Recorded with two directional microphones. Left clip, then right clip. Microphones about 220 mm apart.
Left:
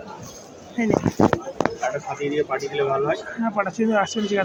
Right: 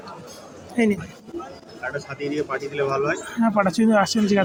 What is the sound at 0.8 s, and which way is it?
Speech, 55° right (ahead or behind).